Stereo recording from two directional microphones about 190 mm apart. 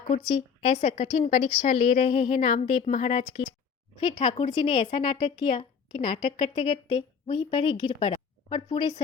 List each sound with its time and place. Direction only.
0.3 s a woman's voice: 25° left (ahead or behind)
4.2 s a woman's voice: 25° left (ahead or behind)